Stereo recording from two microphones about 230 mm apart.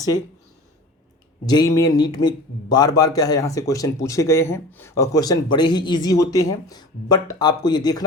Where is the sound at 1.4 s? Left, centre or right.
Centre.